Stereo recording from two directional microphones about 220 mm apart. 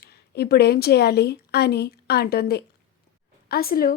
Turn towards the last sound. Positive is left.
turn(degrees=40)  # may be behind; listen again after turning